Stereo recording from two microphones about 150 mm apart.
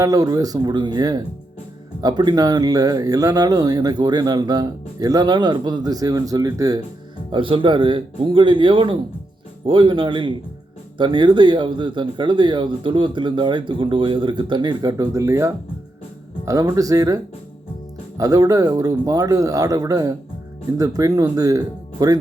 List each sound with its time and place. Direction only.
0.0 s speech: 25° right (ahead or behind)
7.3 s speech: 35° right (ahead or behind)
18.2 s speech: 25° right (ahead or behind)